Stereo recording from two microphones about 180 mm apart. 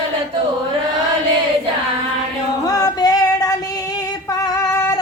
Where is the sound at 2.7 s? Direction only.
20° left (ahead or behind).